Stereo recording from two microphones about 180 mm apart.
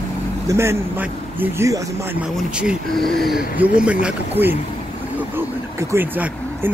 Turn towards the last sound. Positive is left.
turn(degrees=-10)  # may be behind; listen again after turning